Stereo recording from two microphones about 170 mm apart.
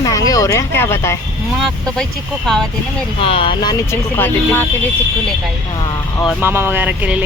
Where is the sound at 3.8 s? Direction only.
15° left (ahead or behind).